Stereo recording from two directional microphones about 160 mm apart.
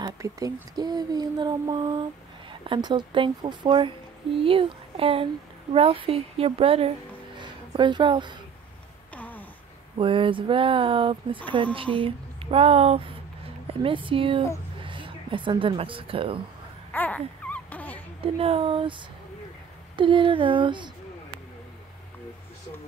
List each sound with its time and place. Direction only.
0.0 s speech: 20° right (ahead or behind)
9.1 s a sound: 10° left (ahead or behind)
9.9 s speech: 35° right (ahead or behind)
16.9 s a sound: 10° left (ahead or behind)
18.2 s speech: 35° right (ahead or behind)
20.0 s speech: 30° right (ahead or behind)